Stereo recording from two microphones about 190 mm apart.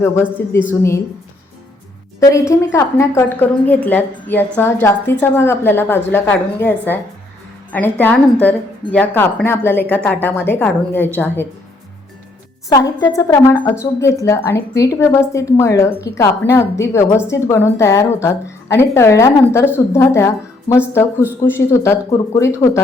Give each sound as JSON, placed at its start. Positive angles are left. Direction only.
{"t": 0.0, "sound": "a woman's voice", "side_deg": 10}
{"t": 2.2, "sound": "a woman's voice", "side_deg": 15}
{"t": 12.6, "sound": "a woman's voice", "side_deg": 15}